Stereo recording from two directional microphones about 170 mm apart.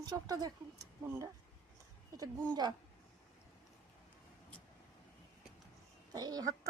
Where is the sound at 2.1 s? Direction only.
25° right (ahead or behind).